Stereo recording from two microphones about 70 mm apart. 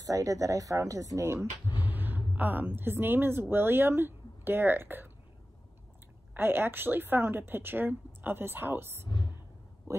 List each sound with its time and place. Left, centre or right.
0.0 s speech: right
1.8 s speech: right
6.3 s a woman's voice: right